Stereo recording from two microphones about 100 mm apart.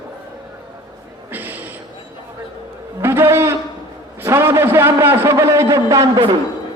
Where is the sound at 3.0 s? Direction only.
25° right (ahead or behind).